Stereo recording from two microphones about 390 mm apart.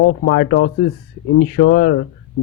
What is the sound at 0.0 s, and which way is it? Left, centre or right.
Speech, left.